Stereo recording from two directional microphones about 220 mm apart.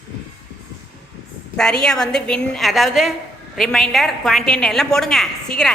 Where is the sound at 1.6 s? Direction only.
Centre (ahead or behind).